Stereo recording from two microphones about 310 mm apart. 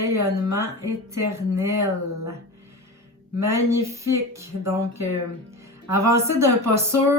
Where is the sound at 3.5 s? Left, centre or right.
Centre.